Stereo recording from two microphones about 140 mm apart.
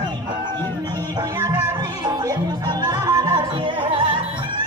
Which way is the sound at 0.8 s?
30° right (ahead or behind).